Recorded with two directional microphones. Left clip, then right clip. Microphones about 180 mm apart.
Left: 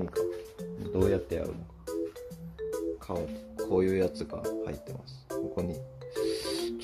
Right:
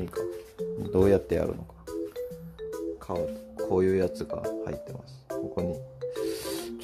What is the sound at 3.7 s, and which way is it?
Speech, 20° right (ahead or behind).